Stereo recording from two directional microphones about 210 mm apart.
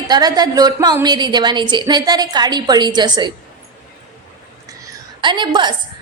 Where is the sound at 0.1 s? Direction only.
20° right (ahead or behind).